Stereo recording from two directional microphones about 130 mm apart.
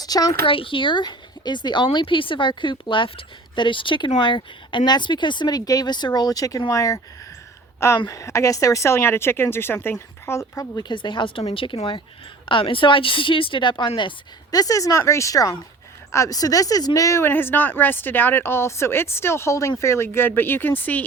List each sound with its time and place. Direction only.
0.0 s speech: 30° left (ahead or behind)
0.4 s a woman's voice: 45° left (ahead or behind); by 7.0 s 25° left (ahead or behind)
8.0 s a woman's voice: 25° left (ahead or behind)
14.5 s a woman's voice: 25° left (ahead or behind)